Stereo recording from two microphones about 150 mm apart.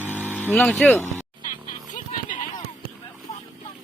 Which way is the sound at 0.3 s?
Centre (ahead or behind).